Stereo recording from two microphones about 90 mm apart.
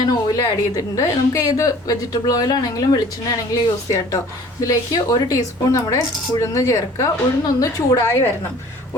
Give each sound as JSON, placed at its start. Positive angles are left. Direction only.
{"t": 0.0, "sound": "a woman's voice", "side_deg": 45}